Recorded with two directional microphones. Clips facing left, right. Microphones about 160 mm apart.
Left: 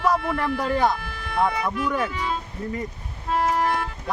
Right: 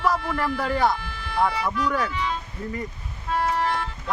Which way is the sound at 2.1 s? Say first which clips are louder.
Even; 40° left (ahead or behind).